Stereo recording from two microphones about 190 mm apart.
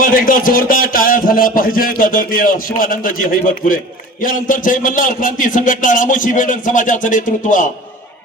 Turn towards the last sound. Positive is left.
turn(degrees=40)  # may be behind; listen again after turning